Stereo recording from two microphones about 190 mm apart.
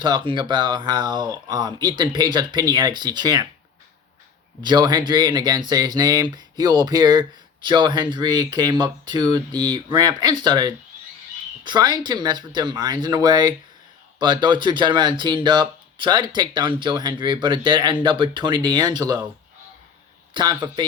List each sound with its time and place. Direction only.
0.0 s speech: 25° right (ahead or behind)
4.6 s speech: 20° right (ahead or behind)
20.3 s speech: 25° right (ahead or behind)